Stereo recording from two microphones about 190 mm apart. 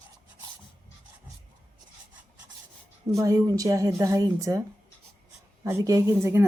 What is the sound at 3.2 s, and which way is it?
A woman's voice, 15° right (ahead or behind).